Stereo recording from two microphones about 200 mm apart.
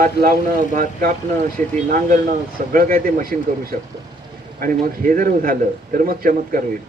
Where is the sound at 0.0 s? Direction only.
45° right (ahead or behind).